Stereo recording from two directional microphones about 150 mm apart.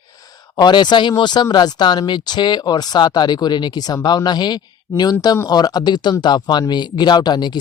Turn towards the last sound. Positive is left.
turn(degrees=30)  # may be behind; listen again after turning